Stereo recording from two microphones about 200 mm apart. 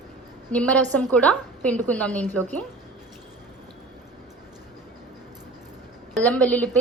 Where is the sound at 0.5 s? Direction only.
5° left (ahead or behind).